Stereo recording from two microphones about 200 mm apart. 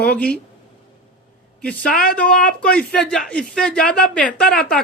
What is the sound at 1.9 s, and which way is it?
Speech, 45° left (ahead or behind).